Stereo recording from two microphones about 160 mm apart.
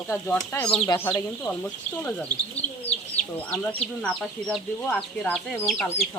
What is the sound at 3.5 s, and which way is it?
Speech, 5° left (ahead or behind).